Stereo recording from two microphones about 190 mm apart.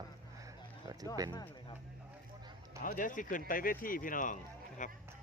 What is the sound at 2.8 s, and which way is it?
Speech, 45° left (ahead or behind).